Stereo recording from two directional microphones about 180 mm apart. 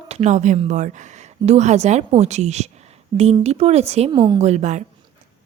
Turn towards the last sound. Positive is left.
turn(degrees=-40)  # may be behind; listen again after turning